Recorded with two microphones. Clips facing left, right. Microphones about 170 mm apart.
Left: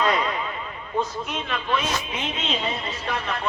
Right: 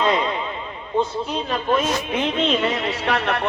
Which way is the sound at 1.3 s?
40° right (ahead or behind).